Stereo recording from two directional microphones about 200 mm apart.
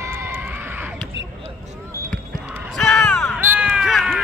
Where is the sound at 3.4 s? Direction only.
10° right (ahead or behind).